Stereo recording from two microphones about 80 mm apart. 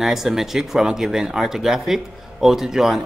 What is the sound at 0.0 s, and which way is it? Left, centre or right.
Speech, centre.